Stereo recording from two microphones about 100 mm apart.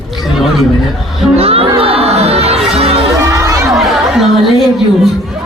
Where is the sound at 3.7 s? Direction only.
Centre (ahead or behind).